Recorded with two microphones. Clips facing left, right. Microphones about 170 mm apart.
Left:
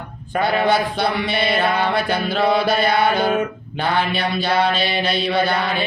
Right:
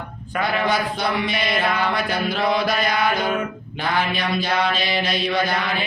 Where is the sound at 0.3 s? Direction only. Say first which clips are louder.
Left 4 dB; 30° left (ahead or behind).